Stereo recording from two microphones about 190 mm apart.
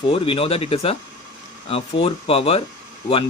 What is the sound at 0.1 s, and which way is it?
Speech, 30° left (ahead or behind).